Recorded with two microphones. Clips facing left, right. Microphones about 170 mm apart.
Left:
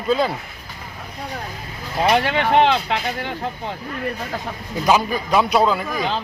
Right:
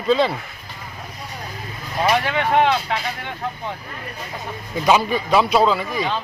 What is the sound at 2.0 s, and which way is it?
Speech, 30° left (ahead or behind).